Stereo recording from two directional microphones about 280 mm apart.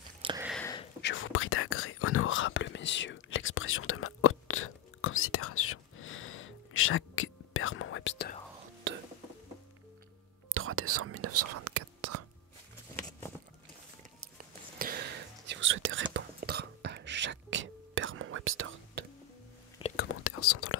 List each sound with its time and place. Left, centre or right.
0.2 s a sound: centre
0.5 s whispering: centre
1.0 s whispering: left
8.9 s a sound: right
10.5 s whispering: right
14.4 s whispering: right
20.0 s whispering: left